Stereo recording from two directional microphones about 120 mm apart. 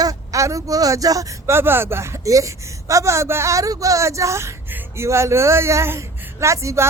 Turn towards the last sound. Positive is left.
turn(degrees=-25)  # may be behind; listen again after turning